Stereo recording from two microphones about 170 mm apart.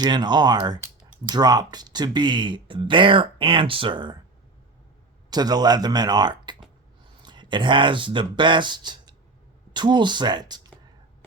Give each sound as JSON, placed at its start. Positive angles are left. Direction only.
{"t": 0.0, "sound": "speech", "side_deg": -25}
{"t": 5.3, "sound": "speech", "side_deg": -25}